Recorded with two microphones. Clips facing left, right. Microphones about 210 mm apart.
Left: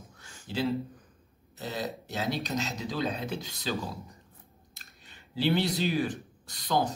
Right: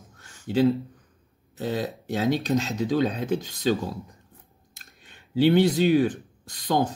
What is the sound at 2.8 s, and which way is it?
Speech, 50° right (ahead or behind).